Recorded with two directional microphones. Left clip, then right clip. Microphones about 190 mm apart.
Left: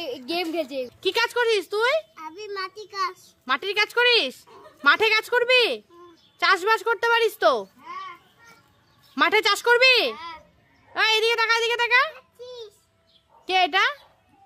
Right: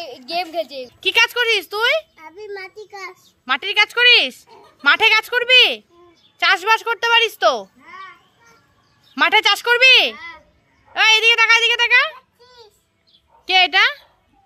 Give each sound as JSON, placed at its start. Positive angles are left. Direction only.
{"t": 0.0, "sound": "a woman's voice", "side_deg": 45}
{"t": 1.0, "sound": "a woman's voice", "side_deg": 10}
{"t": 3.4, "sound": "a woman's voice", "side_deg": 10}
{"t": 9.1, "sound": "a woman's voice", "side_deg": 10}
{"t": 10.1, "sound": "a sound", "side_deg": 35}
{"t": 10.9, "sound": "a woman's voice", "side_deg": 10}
{"t": 13.5, "sound": "a woman's voice", "side_deg": 10}